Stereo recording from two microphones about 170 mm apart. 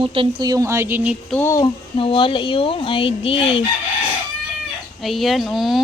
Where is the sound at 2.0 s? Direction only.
30° left (ahead or behind).